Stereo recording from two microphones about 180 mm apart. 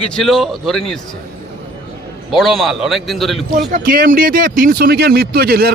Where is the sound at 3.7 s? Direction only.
50° right (ahead or behind).